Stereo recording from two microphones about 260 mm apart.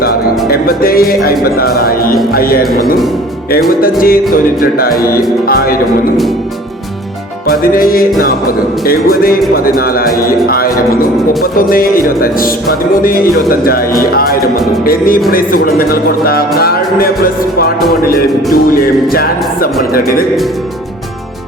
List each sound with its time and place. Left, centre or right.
0.5 s music: left
7.4 s music: left
18.5 s music: left